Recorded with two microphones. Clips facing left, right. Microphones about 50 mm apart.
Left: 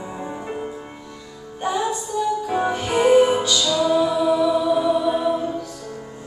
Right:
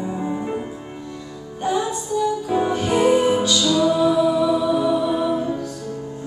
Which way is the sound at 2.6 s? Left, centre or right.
Centre.